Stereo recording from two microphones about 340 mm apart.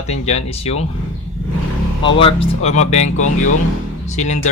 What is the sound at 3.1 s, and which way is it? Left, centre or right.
Speech, left.